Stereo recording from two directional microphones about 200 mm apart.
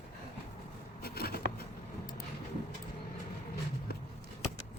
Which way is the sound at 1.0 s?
50° left (ahead or behind).